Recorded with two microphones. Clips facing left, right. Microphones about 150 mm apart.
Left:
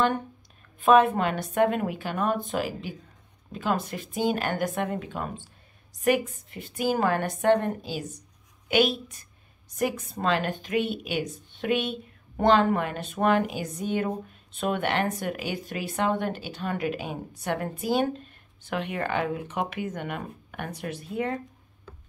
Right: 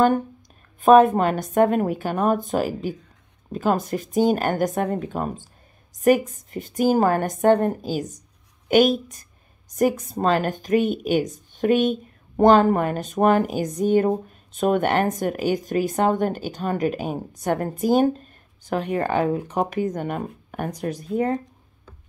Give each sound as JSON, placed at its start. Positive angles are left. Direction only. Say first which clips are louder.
{"t": 0.7, "sound": "speech", "louder": "right 6 dB", "side_deg": -40}